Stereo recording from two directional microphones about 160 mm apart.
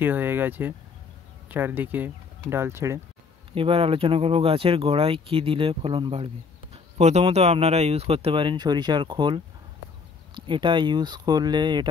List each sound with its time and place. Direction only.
0.0 s speech: 15° right (ahead or behind)
3.5 s speech: 35° right (ahead or behind)
7.0 s speech: 45° right (ahead or behind); by 11.9 s 30° right (ahead or behind)